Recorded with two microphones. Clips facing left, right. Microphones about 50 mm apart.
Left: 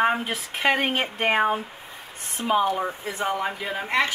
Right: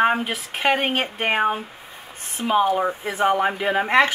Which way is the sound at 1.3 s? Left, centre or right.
Centre.